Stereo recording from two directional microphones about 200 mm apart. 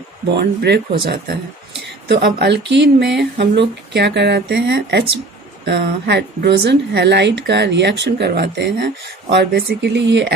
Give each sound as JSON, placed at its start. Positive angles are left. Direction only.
{"t": 0.3, "sound": "speech", "side_deg": -60}